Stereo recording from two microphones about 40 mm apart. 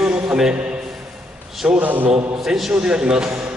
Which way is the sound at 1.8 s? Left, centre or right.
Right.